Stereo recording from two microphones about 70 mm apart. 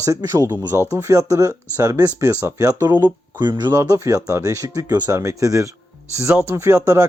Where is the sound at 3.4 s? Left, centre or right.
Right.